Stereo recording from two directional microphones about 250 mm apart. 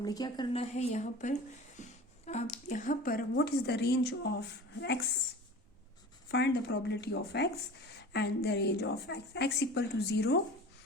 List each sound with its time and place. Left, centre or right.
0.0 s a woman's voice: centre; by 4.9 s left
6.3 s speech: left